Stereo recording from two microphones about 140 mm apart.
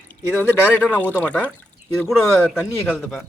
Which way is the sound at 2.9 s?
5° right (ahead or behind).